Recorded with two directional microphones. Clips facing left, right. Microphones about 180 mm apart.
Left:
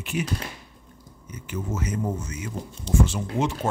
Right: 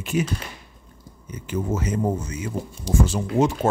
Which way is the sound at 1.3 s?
30° right (ahead or behind).